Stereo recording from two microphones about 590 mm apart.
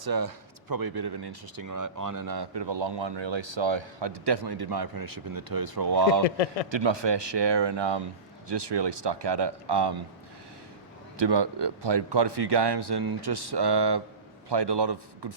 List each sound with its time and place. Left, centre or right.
0.0 s speech: right
6.2 s a man's voice: left
6.7 s speech: right
11.2 s speech: right